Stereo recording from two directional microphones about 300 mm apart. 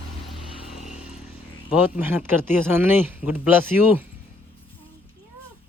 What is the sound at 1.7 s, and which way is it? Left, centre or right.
Speech, centre.